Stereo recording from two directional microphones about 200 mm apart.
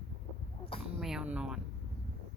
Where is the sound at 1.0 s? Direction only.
Centre (ahead or behind).